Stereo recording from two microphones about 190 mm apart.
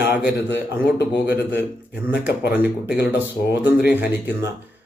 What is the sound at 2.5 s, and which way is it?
A man's voice, 10° right (ahead or behind).